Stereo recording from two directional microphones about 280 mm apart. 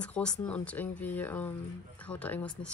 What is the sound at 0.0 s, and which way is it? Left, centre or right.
Speech, centre.